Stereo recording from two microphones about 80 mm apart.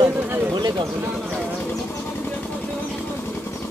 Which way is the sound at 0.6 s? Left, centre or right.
Right.